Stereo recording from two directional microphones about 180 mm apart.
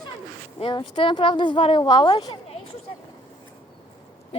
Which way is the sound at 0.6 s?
30° left (ahead or behind).